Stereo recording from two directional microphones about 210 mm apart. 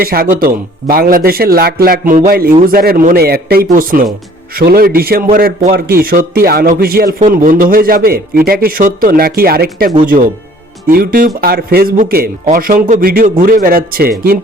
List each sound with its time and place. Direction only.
0.0 s a man's voice: 45° right (ahead or behind)